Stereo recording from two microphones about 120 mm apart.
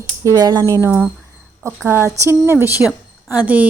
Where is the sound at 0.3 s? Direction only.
35° right (ahead or behind).